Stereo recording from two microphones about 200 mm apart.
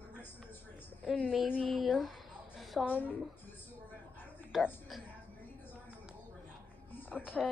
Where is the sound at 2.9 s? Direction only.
10° left (ahead or behind).